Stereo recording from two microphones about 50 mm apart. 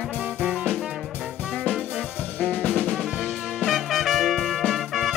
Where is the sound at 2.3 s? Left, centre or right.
Left.